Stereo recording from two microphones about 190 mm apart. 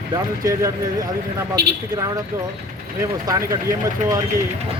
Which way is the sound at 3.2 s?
15° right (ahead or behind).